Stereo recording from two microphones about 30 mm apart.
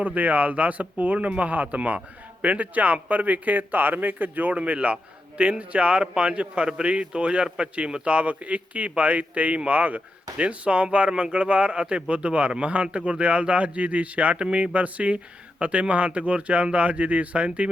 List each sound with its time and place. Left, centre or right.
0.0 s a man's voice: right
4.6 s speech: right
5.4 s speech: right
8.0 s speech: right
10.3 s speech: right